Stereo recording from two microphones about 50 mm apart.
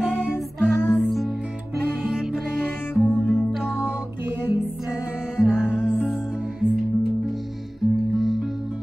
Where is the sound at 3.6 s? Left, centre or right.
Centre.